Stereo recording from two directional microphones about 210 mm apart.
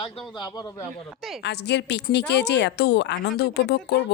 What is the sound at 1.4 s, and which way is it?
Speech, 55° left (ahead or behind).